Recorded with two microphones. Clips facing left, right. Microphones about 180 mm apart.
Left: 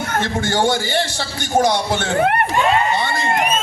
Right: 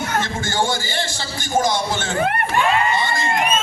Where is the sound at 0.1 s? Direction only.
60° left (ahead or behind).